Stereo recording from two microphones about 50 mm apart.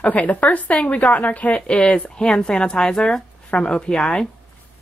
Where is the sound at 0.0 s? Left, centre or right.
Left.